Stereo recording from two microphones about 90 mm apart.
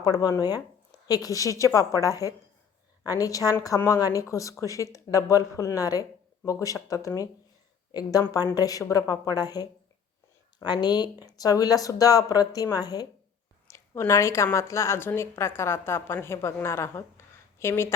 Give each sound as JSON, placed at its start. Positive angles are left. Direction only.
{"t": 0.0, "sound": "speech", "side_deg": 45}
{"t": 8.5, "sound": "speech", "side_deg": 45}
{"t": 13.7, "sound": "a sound", "side_deg": 35}
{"t": 14.1, "sound": "a woman's voice", "side_deg": 35}